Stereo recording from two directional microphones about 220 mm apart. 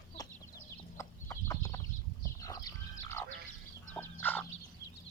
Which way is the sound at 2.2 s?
15° left (ahead or behind).